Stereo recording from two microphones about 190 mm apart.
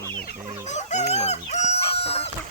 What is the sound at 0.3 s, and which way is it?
Chicken, 40° left (ahead or behind).